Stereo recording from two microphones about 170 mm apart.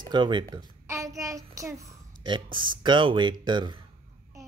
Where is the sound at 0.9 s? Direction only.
20° right (ahead or behind).